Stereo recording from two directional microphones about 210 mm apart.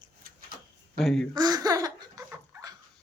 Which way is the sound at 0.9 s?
Centre (ahead or behind).